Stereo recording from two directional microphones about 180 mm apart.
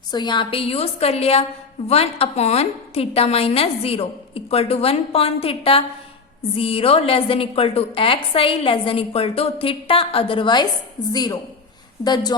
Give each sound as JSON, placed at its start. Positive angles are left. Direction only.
{"t": 0.1, "sound": "a woman's voice", "side_deg": 25}